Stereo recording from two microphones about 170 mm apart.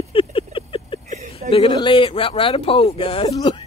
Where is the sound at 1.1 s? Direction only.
40° right (ahead or behind).